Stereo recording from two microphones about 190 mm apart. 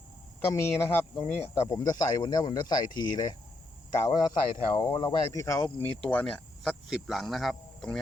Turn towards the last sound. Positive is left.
turn(degrees=0)  # may be behind; listen again after turning